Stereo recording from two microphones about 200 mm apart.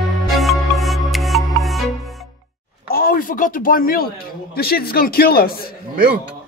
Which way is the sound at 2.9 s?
45° left (ahead or behind).